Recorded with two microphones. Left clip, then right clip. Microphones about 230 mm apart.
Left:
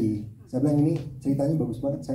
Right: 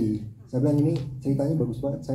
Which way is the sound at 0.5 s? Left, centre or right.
Left.